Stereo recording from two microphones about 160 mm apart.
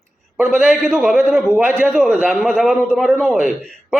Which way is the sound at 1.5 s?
10° right (ahead or behind).